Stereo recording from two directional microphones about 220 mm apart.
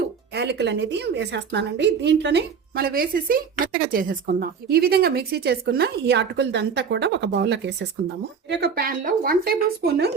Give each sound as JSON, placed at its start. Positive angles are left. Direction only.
{"t": 0.3, "sound": "a woman's voice", "side_deg": -50}